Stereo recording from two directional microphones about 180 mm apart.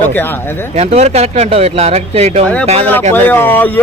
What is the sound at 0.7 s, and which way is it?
Speech, 40° right (ahead or behind).